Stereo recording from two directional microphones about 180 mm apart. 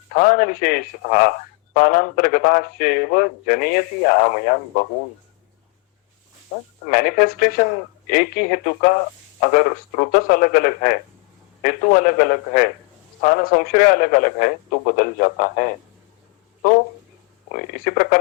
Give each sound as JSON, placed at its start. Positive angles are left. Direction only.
{"t": 0.1, "sound": "a man's voice", "side_deg": 50}
{"t": 6.5, "sound": "a man's voice", "side_deg": 40}
{"t": 17.5, "sound": "a man's voice", "side_deg": 50}